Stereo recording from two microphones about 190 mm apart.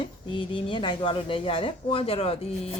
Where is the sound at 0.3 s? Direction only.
25° left (ahead or behind).